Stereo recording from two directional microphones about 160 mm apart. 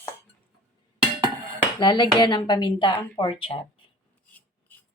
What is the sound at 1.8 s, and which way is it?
A woman's voice, 30° left (ahead or behind).